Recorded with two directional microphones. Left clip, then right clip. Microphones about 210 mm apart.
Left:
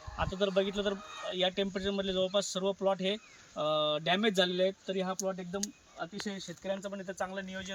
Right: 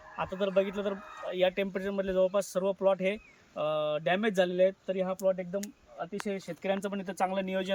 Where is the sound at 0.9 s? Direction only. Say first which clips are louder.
Right 1 dB; centre (ahead or behind).